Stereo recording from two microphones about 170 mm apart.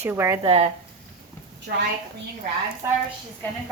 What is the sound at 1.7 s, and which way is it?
Speech, 70° right (ahead or behind).